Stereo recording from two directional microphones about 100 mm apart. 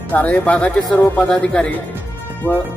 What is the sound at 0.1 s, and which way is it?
Speech, 15° left (ahead or behind).